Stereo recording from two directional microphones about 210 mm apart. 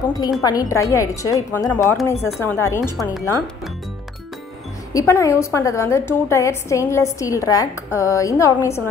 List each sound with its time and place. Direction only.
0.4 s a woman's voice: 15° left (ahead or behind)
3.0 s speech: centre (ahead or behind)
4.9 s a woman's voice: 15° left (ahead or behind)